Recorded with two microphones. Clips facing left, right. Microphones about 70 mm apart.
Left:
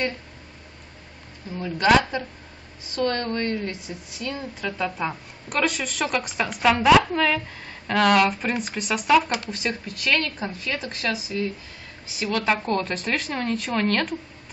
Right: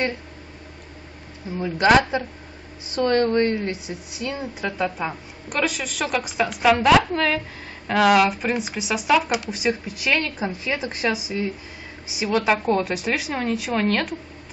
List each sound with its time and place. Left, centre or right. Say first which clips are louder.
1.6 s a woman's voice: right 2 dB; centre
9.3 s speech: right 4 dB; centre